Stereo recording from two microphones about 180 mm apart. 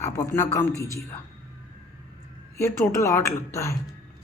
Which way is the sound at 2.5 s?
15° left (ahead or behind).